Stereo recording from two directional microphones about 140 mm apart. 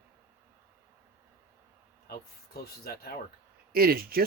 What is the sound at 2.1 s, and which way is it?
Speech, 90° left.